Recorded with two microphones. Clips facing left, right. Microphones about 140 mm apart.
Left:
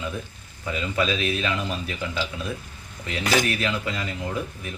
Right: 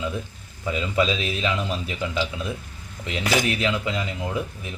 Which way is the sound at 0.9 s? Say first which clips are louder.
Right 1 dB; 20° right (ahead or behind).